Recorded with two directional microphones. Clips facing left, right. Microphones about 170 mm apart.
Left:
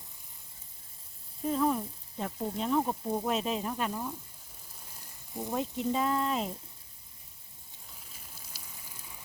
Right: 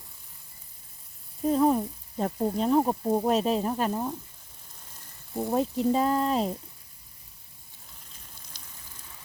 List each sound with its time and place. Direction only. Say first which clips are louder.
1.5 s sizzle: right 6 dB; 35° right (ahead or behind)
5.5 s sizzle: right 7 dB; 40° right (ahead or behind)
8.5 s a sound: even; 10° left (ahead or behind)